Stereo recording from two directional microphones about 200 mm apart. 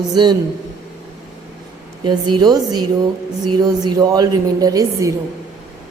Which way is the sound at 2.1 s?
20° right (ahead or behind).